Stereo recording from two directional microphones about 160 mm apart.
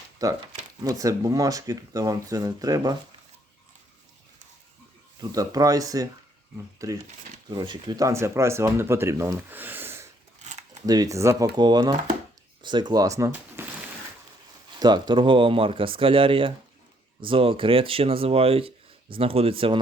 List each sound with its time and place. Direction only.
0.2 s speech: 25° right (ahead or behind)
5.2 s speech: 25° right (ahead or behind)
10.4 s a sound: 45° right (ahead or behind)
10.8 s speech: 20° right (ahead or behind)
14.8 s speech: 25° right (ahead or behind)